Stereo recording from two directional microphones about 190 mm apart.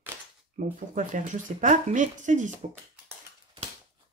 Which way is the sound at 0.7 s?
40° right (ahead or behind).